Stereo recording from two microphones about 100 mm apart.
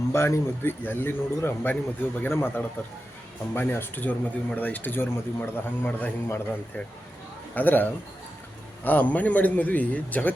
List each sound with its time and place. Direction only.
0.1 s a man's voice: 25° left (ahead or behind)